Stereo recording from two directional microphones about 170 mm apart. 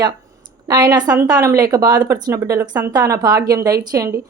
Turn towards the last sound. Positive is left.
turn(degrees=-20)  # may be behind; listen again after turning